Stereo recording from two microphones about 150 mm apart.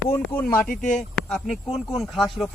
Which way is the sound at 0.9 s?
Centre (ahead or behind).